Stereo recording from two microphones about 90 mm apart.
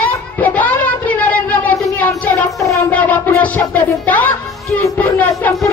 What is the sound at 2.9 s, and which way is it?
Music, 15° left (ahead or behind).